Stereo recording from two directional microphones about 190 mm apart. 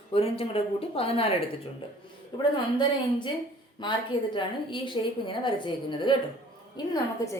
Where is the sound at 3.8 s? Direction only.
25° left (ahead or behind).